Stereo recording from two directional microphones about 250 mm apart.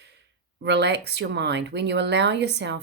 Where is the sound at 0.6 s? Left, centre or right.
Right.